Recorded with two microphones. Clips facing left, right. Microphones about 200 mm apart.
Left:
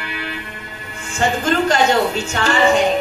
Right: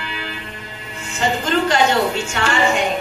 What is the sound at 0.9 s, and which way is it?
Speech, 50° left (ahead or behind).